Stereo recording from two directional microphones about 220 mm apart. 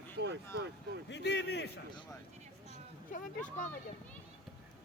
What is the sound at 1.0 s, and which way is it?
Speech, 50° left (ahead or behind).